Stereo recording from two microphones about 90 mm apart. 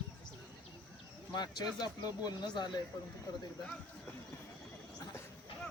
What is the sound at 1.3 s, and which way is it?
Speech, 50° left (ahead or behind).